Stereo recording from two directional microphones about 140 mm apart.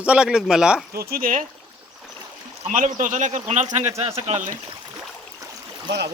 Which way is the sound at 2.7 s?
65° right (ahead or behind).